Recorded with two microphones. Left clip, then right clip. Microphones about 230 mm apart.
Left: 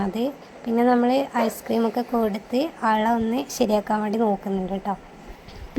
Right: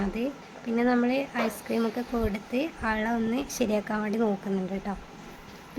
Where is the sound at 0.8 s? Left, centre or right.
Centre.